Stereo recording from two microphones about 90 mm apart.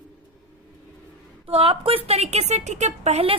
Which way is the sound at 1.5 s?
90° right.